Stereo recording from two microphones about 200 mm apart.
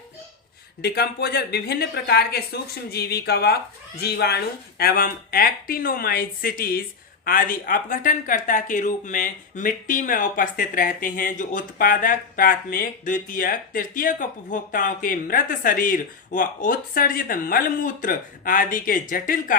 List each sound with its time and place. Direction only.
0.8 s speech: 50° left (ahead or behind)